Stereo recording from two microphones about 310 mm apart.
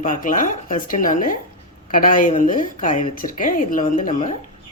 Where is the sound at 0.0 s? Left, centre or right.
Left.